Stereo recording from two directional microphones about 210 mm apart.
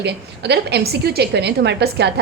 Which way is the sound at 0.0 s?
55° right (ahead or behind).